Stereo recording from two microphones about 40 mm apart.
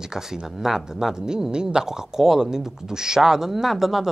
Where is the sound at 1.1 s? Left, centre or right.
Centre.